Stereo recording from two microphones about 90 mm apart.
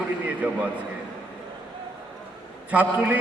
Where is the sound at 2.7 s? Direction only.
15° right (ahead or behind).